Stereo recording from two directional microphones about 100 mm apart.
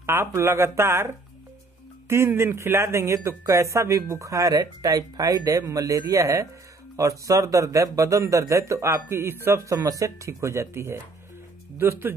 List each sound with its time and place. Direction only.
0.0 s a man's voice: 25° right (ahead or behind)
9.8 s speech: 35° right (ahead or behind)